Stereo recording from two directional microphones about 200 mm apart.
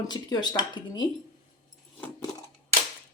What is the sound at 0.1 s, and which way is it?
Speech, 20° left (ahead or behind).